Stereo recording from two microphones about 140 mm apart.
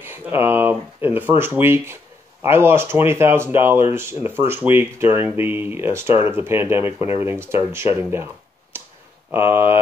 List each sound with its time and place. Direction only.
0.0 s speech: 15° right (ahead or behind)
9.3 s speech: 15° right (ahead or behind)